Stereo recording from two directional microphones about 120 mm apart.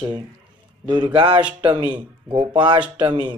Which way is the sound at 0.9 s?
35° right (ahead or behind).